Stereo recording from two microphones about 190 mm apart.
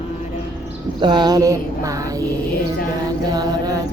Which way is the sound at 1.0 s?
20° right (ahead or behind).